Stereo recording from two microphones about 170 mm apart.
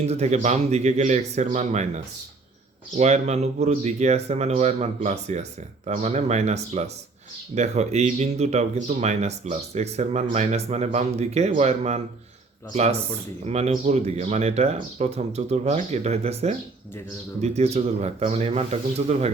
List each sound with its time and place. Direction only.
0.0 s speech: 40° right (ahead or behind)
3.0 s speech: 40° right (ahead or behind)